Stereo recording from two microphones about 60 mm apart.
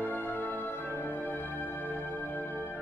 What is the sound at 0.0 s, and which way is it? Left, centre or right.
Music, left.